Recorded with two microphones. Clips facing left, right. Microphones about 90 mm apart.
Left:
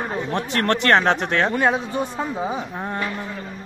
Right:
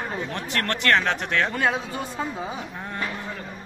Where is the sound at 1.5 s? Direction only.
15° left (ahead or behind).